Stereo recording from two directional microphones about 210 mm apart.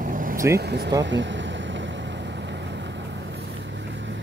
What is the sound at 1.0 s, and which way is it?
Vehicle, 60° right (ahead or behind).